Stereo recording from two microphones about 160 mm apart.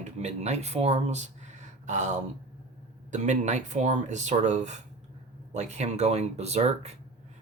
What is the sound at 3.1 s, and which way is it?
Speech, 50° right (ahead or behind).